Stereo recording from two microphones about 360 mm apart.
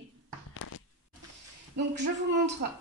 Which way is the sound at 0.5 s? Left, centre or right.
Left.